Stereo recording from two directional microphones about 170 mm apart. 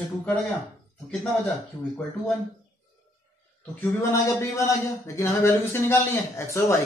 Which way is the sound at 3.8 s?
15° left (ahead or behind).